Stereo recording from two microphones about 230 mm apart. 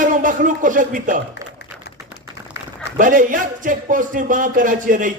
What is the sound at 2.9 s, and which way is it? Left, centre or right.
Speech, right.